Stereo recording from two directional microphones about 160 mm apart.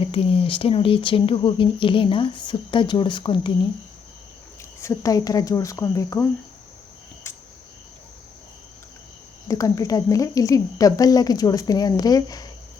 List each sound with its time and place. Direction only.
0.1 s speech: 35° left (ahead or behind)
4.8 s speech: 20° left (ahead or behind)
7.3 s cricket: 15° left (ahead or behind)
9.5 s speech: 20° left (ahead or behind)